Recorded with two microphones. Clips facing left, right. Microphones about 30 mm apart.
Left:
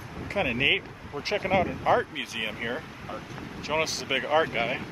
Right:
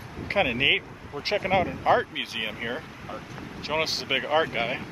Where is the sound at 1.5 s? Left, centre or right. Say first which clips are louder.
Right 1 dB; centre.